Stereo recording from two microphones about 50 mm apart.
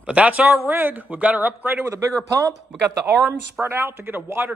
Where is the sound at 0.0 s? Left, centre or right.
Right.